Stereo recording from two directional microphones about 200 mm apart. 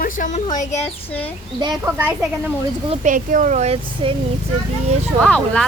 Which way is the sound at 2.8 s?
35° right (ahead or behind).